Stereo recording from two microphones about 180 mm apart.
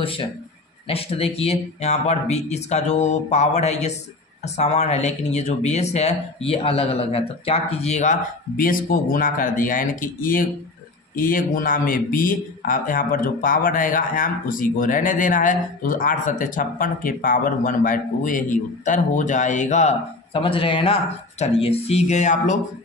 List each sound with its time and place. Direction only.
0.0 s speech: 30° left (ahead or behind)